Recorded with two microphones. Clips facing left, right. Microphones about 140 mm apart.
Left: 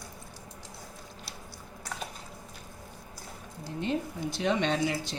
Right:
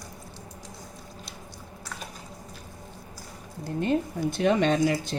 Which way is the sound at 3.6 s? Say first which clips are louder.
Right 6 dB; 55° right (ahead or behind).